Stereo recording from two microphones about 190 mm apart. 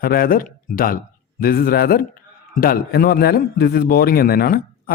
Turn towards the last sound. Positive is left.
turn(degrees=50)  # may be behind; listen again after turning